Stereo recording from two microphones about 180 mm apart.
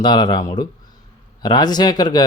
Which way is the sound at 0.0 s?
25° left (ahead or behind).